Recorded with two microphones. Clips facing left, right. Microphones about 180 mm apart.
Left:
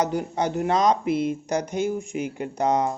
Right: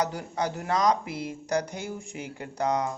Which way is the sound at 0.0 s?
20° left (ahead or behind).